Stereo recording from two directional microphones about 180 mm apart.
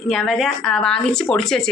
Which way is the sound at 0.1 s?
Centre (ahead or behind).